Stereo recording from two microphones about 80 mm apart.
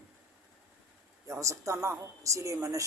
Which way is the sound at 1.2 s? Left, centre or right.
Right.